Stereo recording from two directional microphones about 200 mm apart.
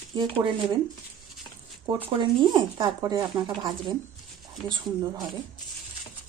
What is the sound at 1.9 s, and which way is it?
Speech, 25° right (ahead or behind).